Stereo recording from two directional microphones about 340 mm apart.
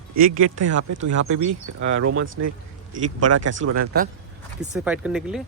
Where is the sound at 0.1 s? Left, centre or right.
Right.